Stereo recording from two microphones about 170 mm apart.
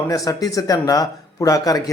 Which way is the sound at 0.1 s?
20° left (ahead or behind).